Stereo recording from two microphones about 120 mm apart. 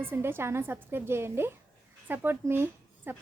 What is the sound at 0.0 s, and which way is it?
A woman's voice, 20° right (ahead or behind).